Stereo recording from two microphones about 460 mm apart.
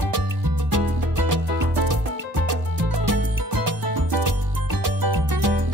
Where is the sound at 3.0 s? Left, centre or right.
Right.